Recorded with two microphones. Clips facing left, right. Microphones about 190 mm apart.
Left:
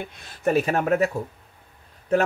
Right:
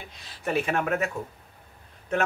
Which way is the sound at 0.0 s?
55° left (ahead or behind).